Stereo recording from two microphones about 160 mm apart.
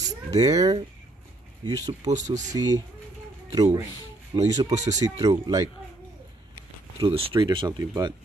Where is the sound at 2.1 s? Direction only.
50° right (ahead or behind).